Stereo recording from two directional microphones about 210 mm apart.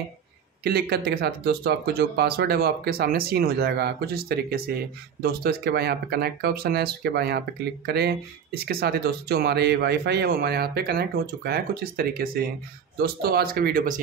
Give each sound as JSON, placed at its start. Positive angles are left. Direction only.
{"t": 0.7, "sound": "speech", "side_deg": -50}